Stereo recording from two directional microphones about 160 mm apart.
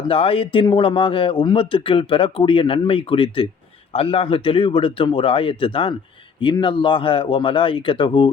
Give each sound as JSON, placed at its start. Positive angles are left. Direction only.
{"t": 0.1, "sound": "speech", "side_deg": 35}